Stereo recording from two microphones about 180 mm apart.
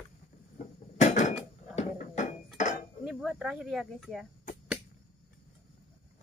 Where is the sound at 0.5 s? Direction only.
40° left (ahead or behind).